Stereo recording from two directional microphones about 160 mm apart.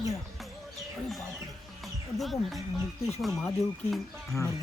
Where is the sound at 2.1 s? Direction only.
Centre (ahead or behind).